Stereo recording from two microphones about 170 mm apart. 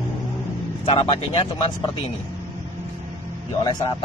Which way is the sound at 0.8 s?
30° left (ahead or behind).